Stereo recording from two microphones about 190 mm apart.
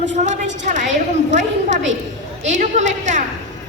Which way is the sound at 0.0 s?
40° right (ahead or behind).